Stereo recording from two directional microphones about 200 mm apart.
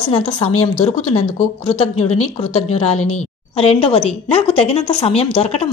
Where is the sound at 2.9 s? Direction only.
90° left.